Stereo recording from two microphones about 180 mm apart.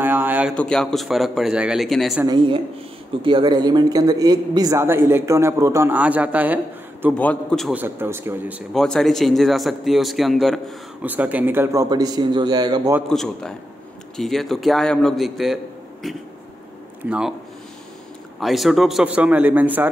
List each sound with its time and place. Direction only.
0.0 s a sound: 10° right (ahead or behind)
0.6 s a man's voice: 5° left (ahead or behind)
2.2 s a woman's voice: 25° right (ahead or behind); by 7.2 s 10° right (ahead or behind)
7.2 s a man's voice: 5° left (ahead or behind)
7.7 s speech: 10° right (ahead or behind)
8.7 s speech: 5° left (ahead or behind); by 12.9 s 20° right (ahead or behind)
13.1 s a man's voice: 5° left (ahead or behind)
18.4 s speech: centre (ahead or behind)